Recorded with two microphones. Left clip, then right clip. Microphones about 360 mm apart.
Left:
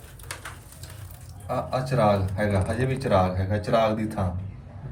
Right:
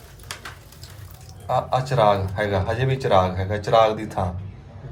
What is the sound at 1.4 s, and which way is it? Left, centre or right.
A man's voice, right.